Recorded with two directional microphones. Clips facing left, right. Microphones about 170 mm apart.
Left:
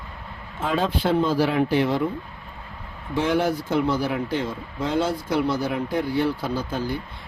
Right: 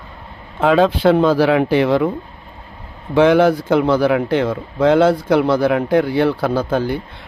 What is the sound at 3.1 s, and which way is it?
Speech, 80° right.